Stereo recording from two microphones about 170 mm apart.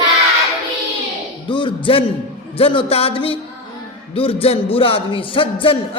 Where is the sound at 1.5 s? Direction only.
30° left (ahead or behind).